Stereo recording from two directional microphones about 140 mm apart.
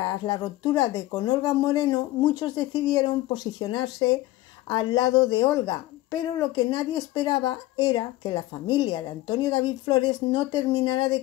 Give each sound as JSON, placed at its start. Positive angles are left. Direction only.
{"t": 0.0, "sound": "speech", "side_deg": 30}